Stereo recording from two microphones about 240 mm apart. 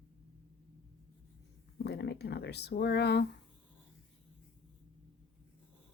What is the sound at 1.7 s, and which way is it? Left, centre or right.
Speech, left.